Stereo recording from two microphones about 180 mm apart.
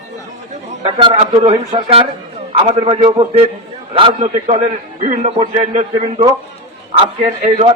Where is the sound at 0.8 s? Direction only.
30° right (ahead or behind).